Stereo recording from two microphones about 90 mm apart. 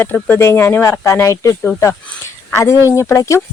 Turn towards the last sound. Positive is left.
turn(degrees=35)  # may be behind; listen again after turning